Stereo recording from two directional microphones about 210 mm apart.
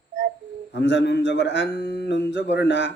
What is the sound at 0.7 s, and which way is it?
A man's voice, 55° left (ahead or behind).